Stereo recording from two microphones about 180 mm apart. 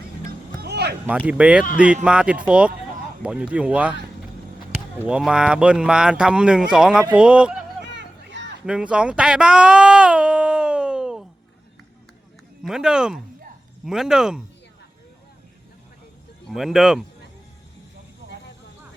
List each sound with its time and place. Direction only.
0.3 s music: 65° right (ahead or behind)
1.0 s speech: 10° right (ahead or behind)
7.9 s a sound: 75° right (ahead or behind)
8.6 s a sound: 5° right (ahead or behind)
12.6 s speech: 5° right (ahead or behind)
16.5 s speech: centre (ahead or behind)